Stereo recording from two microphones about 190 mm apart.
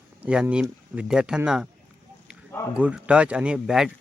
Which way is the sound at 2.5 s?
15° left (ahead or behind).